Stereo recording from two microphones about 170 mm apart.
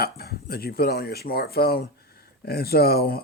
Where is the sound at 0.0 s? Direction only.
65° left (ahead or behind).